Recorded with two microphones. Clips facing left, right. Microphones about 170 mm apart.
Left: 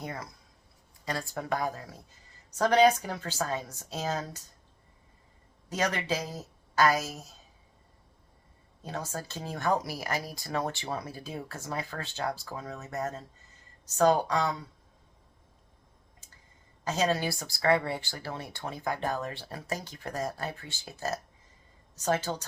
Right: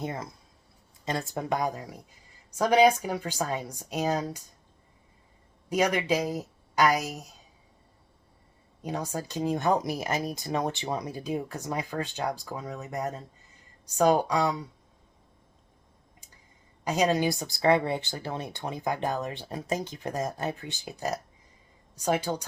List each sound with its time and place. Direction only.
0.0 s speech: 25° right (ahead or behind)
5.6 s speech: 15° right (ahead or behind)
8.8 s speech: 15° right (ahead or behind)
16.8 s speech: 15° right (ahead or behind)